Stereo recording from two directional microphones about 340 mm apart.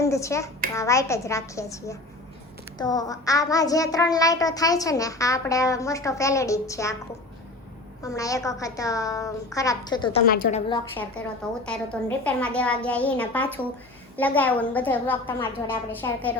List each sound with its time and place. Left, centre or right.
0.0 s a child's voice: centre
0.7 s child singing: centre
8.0 s child singing: centre
10.2 s a woman's voice: left
10.7 s child singing: centre
11.4 s a woman's voice: centre